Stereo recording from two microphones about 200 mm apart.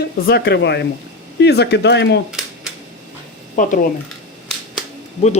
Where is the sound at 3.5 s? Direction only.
40° left (ahead or behind).